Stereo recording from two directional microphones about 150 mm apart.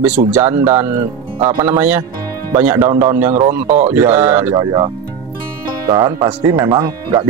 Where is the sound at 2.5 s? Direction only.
15° right (ahead or behind).